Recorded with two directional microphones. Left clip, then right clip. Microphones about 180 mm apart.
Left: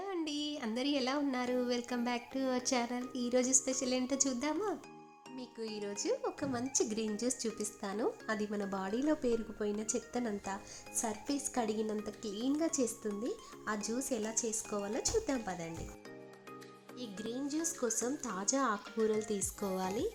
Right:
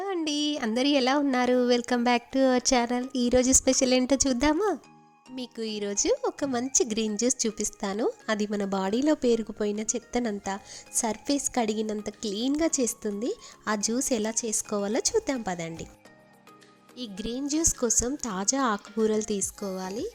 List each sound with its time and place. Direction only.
0.0 s speech: 40° right (ahead or behind)
17.0 s speech: 35° right (ahead or behind)